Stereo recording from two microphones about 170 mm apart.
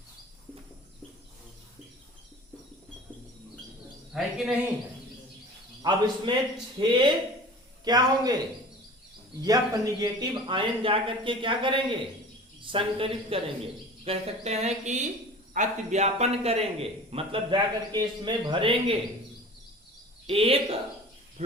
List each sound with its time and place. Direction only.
4.1 s a man's voice: centre (ahead or behind)
5.8 s a man's voice: 30° right (ahead or behind)
9.4 s a man's voice: 20° right (ahead or behind)
20.2 s a man's voice: 35° right (ahead or behind)